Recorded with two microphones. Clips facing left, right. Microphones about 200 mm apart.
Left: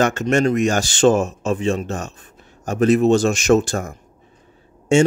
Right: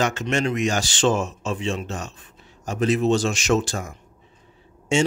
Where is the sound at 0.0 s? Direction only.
50° left (ahead or behind).